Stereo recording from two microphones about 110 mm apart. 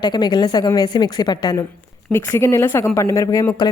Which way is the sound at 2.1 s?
25° left (ahead or behind).